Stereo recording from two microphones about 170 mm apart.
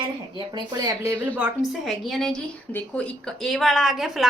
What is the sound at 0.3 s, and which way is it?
Speech, 25° right (ahead or behind).